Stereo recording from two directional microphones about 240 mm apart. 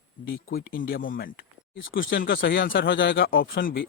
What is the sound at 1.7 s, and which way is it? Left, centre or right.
Speech, left.